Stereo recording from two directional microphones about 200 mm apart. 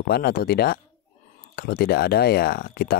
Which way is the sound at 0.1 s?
50° left (ahead or behind).